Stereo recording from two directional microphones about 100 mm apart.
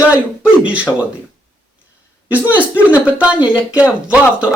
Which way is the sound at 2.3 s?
15° right (ahead or behind).